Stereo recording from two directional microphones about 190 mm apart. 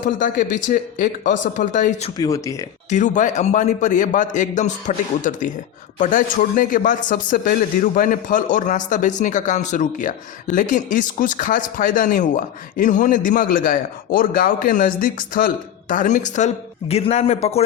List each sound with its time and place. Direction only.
0.0 s a man's voice: 45° left (ahead or behind)
2.1 s speech: 20° left (ahead or behind)
2.9 s a man's voice: 40° left (ahead or behind)